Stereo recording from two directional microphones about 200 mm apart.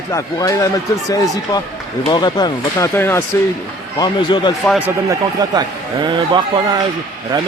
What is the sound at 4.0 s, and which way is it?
Speech, 25° left (ahead or behind).